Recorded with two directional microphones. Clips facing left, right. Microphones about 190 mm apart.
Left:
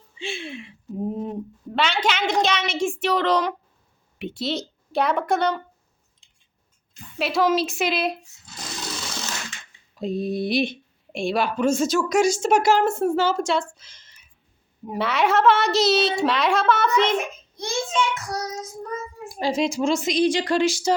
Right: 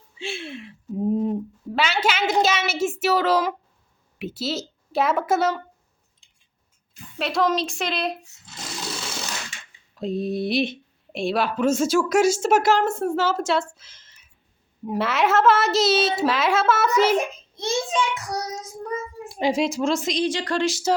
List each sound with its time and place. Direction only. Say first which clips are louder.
0.2 s a woman's voice: even; 5° right (ahead or behind)
7.2 s speech: left 2 dB; centre (ahead or behind)
9.9 s a woman's voice: even; centre (ahead or behind)
17.6 s a child's voice: right 1 dB; 20° right (ahead or behind)
19.6 s speech: left 1 dB; centre (ahead or behind)
20.2 s speech: left 5 dB; 10° left (ahead or behind)